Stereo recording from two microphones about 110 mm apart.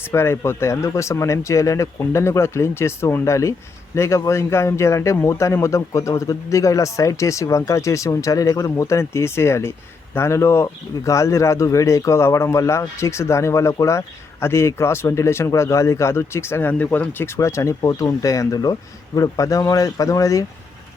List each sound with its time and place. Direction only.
0.0 s speech: 25° left (ahead or behind)